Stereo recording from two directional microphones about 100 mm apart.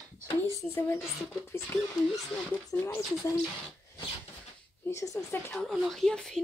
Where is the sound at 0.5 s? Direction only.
30° left (ahead or behind).